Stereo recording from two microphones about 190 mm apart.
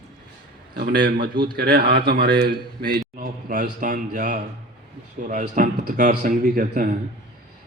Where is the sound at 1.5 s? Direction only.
55° right (ahead or behind).